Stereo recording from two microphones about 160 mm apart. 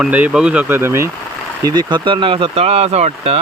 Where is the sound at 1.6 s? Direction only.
25° right (ahead or behind).